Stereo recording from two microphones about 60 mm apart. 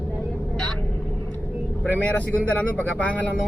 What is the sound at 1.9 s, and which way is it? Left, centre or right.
Speech, left.